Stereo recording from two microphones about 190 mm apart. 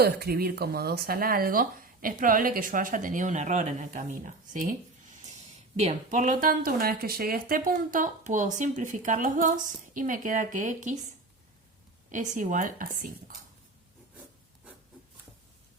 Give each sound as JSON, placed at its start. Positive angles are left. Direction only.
{"t": 0.0, "sound": "speech", "side_deg": -55}
{"t": 5.7, "sound": "speech", "side_deg": -40}
{"t": 12.1, "sound": "speech", "side_deg": -40}